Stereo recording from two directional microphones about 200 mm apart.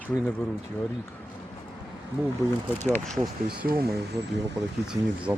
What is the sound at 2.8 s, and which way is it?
Speech, 5° left (ahead or behind).